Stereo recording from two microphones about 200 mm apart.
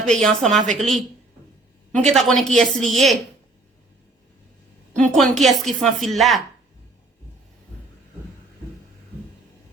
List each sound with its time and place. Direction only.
0.0 s a woman's voice: centre (ahead or behind)
0.6 s a woman's voice: 40° right (ahead or behind)
2.1 s a woman's voice: centre (ahead or behind)
4.9 s a woman's voice: centre (ahead or behind)